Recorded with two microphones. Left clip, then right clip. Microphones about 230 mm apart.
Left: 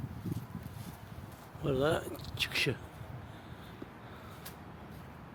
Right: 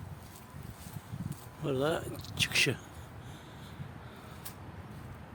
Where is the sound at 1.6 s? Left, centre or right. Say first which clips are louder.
Left 1 dB; centre.